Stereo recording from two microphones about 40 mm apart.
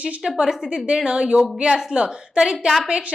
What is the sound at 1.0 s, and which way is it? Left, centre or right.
A woman's voice, right.